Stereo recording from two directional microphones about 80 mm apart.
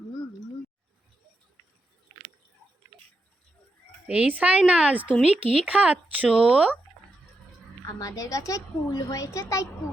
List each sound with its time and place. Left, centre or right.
4.0 s speech: centre
7.9 s a woman's voice: left